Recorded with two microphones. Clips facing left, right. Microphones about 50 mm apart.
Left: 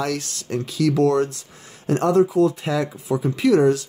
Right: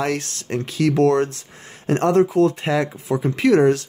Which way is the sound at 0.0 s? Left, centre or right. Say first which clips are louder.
Right 2 dB; right.